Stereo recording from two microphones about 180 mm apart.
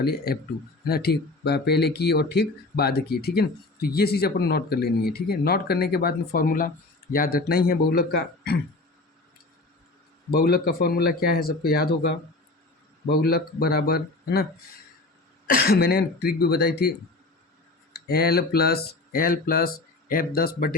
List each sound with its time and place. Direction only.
0.0 s speech: 60° left (ahead or behind)
10.3 s speech: 60° left (ahead or behind)
15.5 s speech: 60° left (ahead or behind)
17.9 s speech: 60° left (ahead or behind)